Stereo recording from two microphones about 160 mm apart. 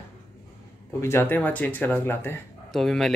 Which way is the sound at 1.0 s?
15° left (ahead or behind).